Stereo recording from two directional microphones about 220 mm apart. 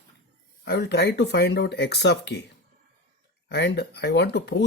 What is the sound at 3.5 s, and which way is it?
Speech, 50° left (ahead or behind).